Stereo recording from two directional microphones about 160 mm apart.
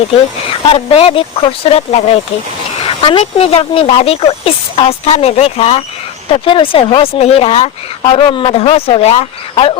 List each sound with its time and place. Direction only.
0.7 s speech: 35° left (ahead or behind)